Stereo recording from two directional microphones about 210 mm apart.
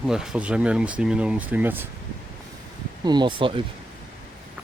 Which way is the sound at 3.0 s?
20° right (ahead or behind).